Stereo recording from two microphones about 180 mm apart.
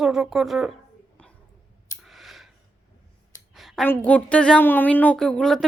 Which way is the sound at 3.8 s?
10° left (ahead or behind).